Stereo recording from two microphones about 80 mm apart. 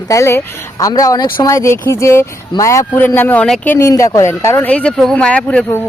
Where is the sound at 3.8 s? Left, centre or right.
Left.